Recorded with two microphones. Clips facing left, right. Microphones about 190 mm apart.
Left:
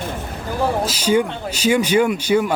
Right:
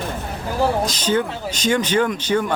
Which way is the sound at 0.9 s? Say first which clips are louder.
Left 3 dB; 10° left (ahead or behind).